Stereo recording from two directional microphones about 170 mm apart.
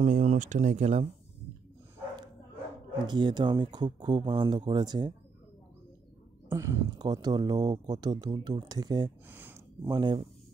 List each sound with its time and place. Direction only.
0.0 s speech: 45° right (ahead or behind)
3.1 s speech: 25° right (ahead or behind)
6.5 s speech: 15° right (ahead or behind)
9.3 s a sound: 10° right (ahead or behind)
9.9 s speech: 25° right (ahead or behind)